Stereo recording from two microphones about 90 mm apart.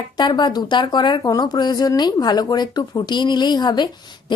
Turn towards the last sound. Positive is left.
turn(degrees=55)  # may be behind; listen again after turning